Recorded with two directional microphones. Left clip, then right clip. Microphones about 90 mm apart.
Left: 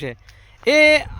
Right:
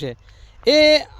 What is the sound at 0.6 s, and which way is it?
Speech, 45° right (ahead or behind).